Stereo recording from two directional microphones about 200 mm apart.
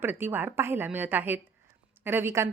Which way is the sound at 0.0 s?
10° right (ahead or behind).